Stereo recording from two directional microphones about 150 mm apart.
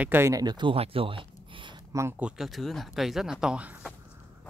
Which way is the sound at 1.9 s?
15° right (ahead or behind).